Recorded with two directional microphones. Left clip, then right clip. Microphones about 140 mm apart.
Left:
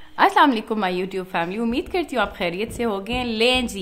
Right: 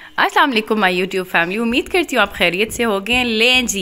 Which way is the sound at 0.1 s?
35° right (ahead or behind).